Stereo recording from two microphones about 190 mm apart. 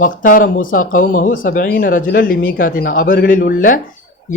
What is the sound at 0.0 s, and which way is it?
Speech, 45° left (ahead or behind).